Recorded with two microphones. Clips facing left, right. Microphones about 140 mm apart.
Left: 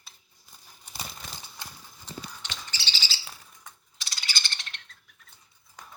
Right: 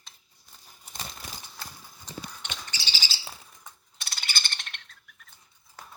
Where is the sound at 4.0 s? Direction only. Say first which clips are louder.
Right 1 dB; 55° right (ahead or behind).